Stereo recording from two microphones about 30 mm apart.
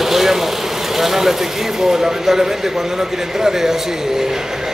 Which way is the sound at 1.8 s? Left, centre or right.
Centre.